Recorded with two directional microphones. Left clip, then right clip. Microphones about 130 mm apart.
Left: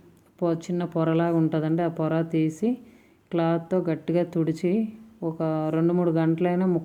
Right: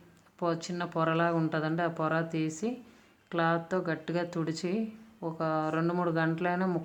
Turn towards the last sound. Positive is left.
turn(degrees=40)  # may be behind; listen again after turning